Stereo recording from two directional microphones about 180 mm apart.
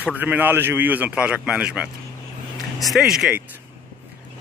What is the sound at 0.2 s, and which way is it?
Speech, 10° right (ahead or behind).